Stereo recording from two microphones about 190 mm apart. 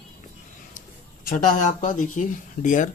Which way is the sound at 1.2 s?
40° left (ahead or behind).